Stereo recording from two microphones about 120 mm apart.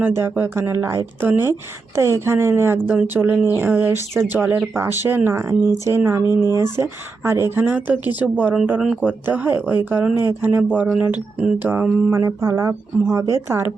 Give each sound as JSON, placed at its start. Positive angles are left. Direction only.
{"t": 0.0, "sound": "speech", "side_deg": -20}
{"t": 7.3, "sound": "speech", "side_deg": -20}